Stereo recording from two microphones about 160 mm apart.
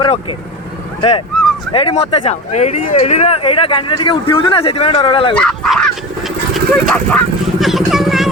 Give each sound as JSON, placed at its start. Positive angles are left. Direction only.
{"t": 0.0, "sound": "speech", "side_deg": 30}
{"t": 1.7, "sound": "speech", "side_deg": 40}
{"t": 5.3, "sound": "a sound", "side_deg": 5}
{"t": 7.6, "sound": "vehicle", "side_deg": 0}